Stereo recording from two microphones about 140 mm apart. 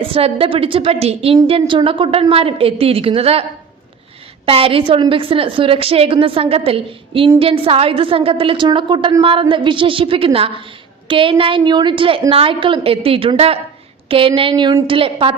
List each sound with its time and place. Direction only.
0.0 s a woman's voice: 40° right (ahead or behind)
4.4 s a woman's voice: 40° right (ahead or behind)